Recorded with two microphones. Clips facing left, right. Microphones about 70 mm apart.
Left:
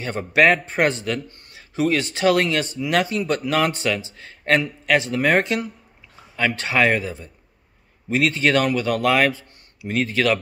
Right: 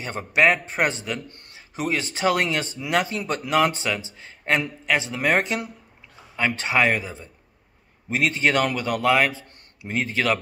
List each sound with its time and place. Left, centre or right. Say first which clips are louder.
0.0 s a man's voice: left 3 dB; centre